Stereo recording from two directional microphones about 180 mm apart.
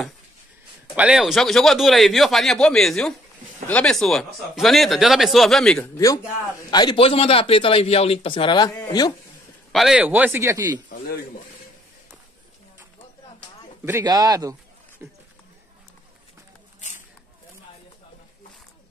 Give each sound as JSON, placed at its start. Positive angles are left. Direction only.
{"t": 0.9, "sound": "speech", "side_deg": -5}
{"t": 5.9, "sound": "a man's voice", "side_deg": 20}
{"t": 9.7, "sound": "a man's voice", "side_deg": 0}
{"t": 13.8, "sound": "a man's voice", "side_deg": -15}